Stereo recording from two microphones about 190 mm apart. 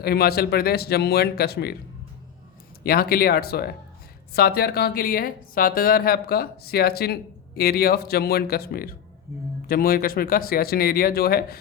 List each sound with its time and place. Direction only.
0.0 s speech: 55° left (ahead or behind)
2.8 s speech: 55° left (ahead or behind)